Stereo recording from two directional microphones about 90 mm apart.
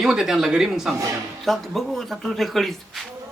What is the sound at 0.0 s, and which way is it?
Speech, 5° right (ahead or behind).